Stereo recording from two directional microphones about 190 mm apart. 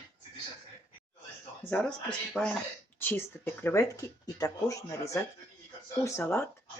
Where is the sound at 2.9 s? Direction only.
10° left (ahead or behind).